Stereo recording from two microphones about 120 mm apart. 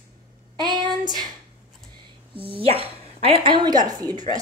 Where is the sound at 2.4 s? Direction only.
50° right (ahead or behind).